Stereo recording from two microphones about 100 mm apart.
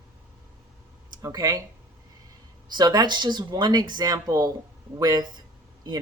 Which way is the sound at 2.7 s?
45° right (ahead or behind).